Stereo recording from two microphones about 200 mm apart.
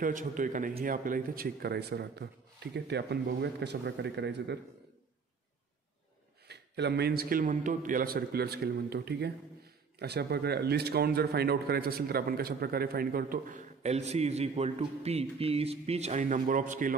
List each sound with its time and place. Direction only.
0.0 s speech: 40° right (ahead or behind); by 4.6 s 60° right (ahead or behind)
6.4 s speech: 55° right (ahead or behind)